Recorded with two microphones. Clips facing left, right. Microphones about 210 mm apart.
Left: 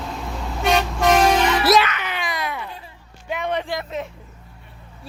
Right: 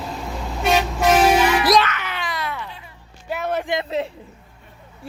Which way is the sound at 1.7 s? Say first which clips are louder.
Even; 15° left (ahead or behind).